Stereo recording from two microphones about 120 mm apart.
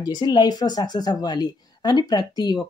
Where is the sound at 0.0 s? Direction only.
35° left (ahead or behind).